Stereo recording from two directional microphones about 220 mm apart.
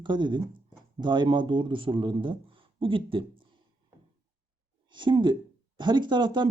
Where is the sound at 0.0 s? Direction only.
20° right (ahead or behind).